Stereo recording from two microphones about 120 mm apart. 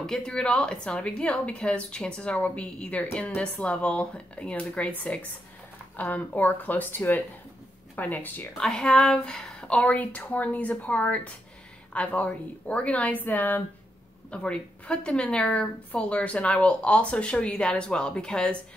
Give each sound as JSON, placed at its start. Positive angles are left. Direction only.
{"t": 0.0, "sound": "a woman's voice", "side_deg": 5}
{"t": 8.5, "sound": "a woman's voice", "side_deg": 5}